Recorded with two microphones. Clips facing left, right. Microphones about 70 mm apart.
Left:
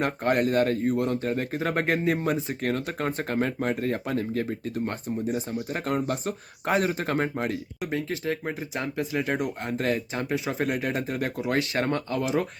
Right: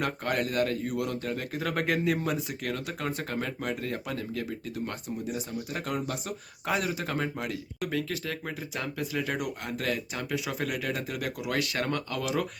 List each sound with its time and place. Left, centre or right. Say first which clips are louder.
0.0 s speech: left 5 dB; left
7.9 s speech: left 4 dB; left